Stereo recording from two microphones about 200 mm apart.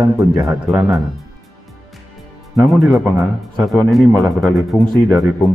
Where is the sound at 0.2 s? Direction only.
15° right (ahead or behind).